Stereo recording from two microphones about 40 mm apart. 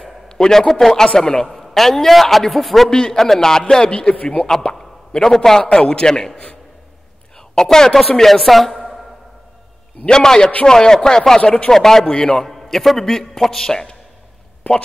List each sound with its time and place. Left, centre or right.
0.3 s a man's voice: centre
1.1 s a man's voice: left
1.5 s a man's voice: centre
2.9 s a man's voice: centre
3.9 s a man's voice: left
4.6 s plop: centre
5.6 s a man's voice: left
7.6 s a man's voice: centre
10.0 s a man's voice: centre
12.1 s a man's voice: left
12.4 s a man's voice: centre